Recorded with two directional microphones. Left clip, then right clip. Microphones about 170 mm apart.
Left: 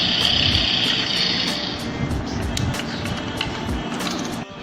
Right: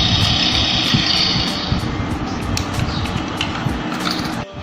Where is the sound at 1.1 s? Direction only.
15° left (ahead or behind).